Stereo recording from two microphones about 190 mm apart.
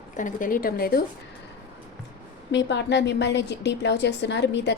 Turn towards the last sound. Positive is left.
turn(degrees=65)  # may be behind; listen again after turning